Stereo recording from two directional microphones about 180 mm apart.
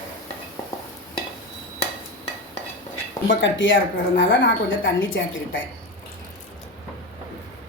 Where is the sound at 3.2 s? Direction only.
90° left.